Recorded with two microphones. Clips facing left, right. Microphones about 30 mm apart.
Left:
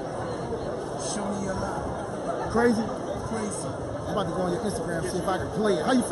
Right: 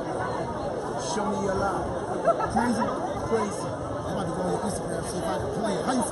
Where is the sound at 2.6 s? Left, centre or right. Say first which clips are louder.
Left 2 dB; centre.